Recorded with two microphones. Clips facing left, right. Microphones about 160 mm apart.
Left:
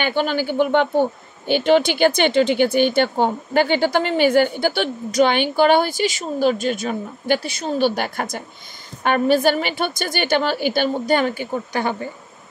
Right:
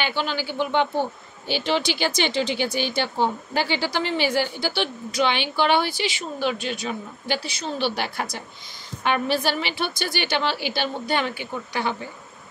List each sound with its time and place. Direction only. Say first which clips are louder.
0.0 s speech: left 6 dB; 50° left (ahead or behind)